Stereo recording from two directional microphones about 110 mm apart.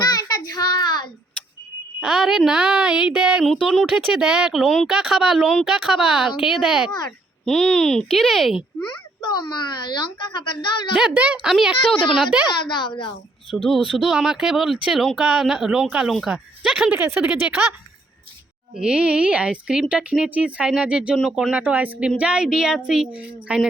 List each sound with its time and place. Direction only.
0.0 s child singing: 35° left (ahead or behind)
2.0 s a woman's voice: 5° right (ahead or behind)
8.9 s a child's voice: 45° left (ahead or behind)
10.9 s a woman's voice: 10° right (ahead or behind)
12.5 s a child's voice: 45° left (ahead or behind)
13.7 s a woman's voice: 5° left (ahead or behind)
16.9 s speech: 15° right (ahead or behind)
18.7 s a woman's voice: 10° right (ahead or behind)